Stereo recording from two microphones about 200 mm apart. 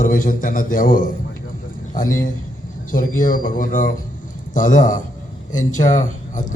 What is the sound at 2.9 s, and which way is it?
A man's voice, 45° left (ahead or behind).